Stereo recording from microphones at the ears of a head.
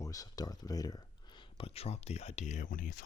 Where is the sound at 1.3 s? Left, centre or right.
Left.